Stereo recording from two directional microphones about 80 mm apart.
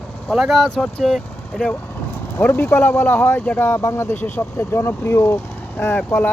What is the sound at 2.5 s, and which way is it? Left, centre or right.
Speech, left.